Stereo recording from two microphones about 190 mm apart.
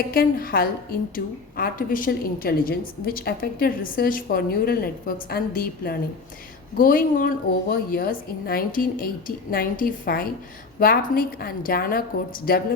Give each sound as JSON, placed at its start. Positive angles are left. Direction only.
{"t": 0.0, "sound": "a woman's voice", "side_deg": 50}